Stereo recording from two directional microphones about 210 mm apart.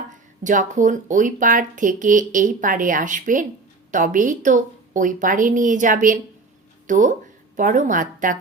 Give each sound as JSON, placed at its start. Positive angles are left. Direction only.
{"t": 0.4, "sound": "speech", "side_deg": -35}